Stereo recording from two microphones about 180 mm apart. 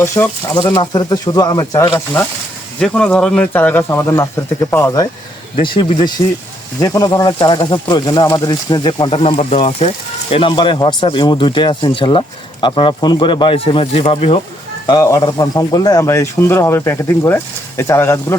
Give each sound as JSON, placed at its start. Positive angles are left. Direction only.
{"t": 0.0, "sound": "speech", "side_deg": 15}
{"t": 2.8, "sound": "speech", "side_deg": 5}
{"t": 5.5, "sound": "speech", "side_deg": 30}
{"t": 14.8, "sound": "speech", "side_deg": 20}